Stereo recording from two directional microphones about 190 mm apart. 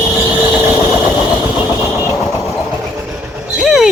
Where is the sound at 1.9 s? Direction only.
15° left (ahead or behind).